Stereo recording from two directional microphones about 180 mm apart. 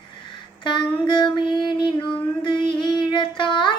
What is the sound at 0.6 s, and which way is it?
Female singing, 25° left (ahead or behind).